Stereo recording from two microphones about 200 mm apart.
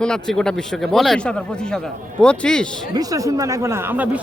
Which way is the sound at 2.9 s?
20° right (ahead or behind).